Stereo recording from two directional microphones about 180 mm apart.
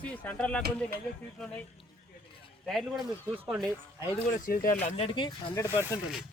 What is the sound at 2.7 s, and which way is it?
Speech, centre (ahead or behind).